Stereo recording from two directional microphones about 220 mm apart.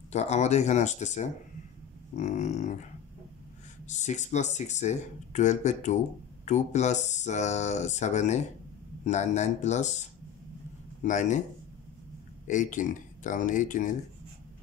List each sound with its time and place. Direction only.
0.1 s speech: 30° left (ahead or behind)
3.8 s a man's voice: 30° left (ahead or behind)
12.4 s speech: 35° left (ahead or behind)